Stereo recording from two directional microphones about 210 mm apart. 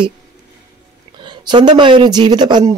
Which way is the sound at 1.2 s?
20° right (ahead or behind).